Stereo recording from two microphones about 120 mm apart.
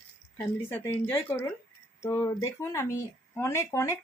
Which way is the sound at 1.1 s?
20° left (ahead or behind).